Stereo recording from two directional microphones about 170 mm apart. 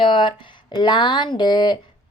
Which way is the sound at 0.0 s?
30° left (ahead or behind).